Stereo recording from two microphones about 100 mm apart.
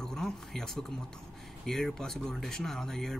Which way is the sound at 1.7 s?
5° left (ahead or behind).